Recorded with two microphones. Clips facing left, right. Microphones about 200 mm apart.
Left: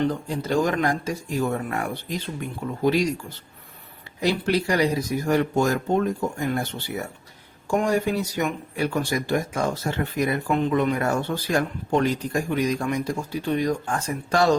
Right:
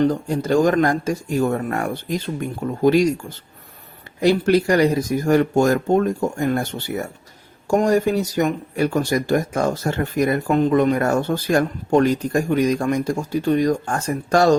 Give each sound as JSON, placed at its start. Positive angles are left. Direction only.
{"t": 0.0, "sound": "speech", "side_deg": -45}